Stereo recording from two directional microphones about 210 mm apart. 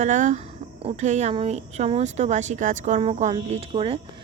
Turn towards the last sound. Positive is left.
turn(degrees=-25)  # may be behind; listen again after turning